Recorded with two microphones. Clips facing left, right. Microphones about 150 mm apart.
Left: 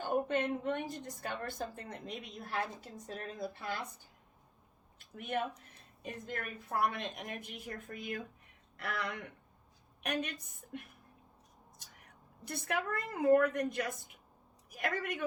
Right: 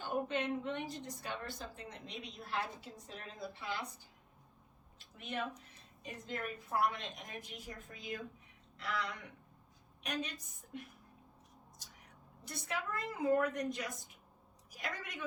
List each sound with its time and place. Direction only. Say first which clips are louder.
0.0 s a woman's voice: left 4 dB; 50° left (ahead or behind)
4.9 s a sound: left 6 dB; 55° left (ahead or behind)
6.0 s a woman's voice: left 1 dB; 50° left (ahead or behind)
11.8 s whispering: even; 60° left (ahead or behind)
12.5 s a woman's voice: left 5 dB; 55° left (ahead or behind)